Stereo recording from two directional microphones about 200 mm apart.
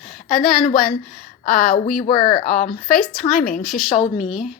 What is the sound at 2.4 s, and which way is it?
A woman's voice, 40° left (ahead or behind).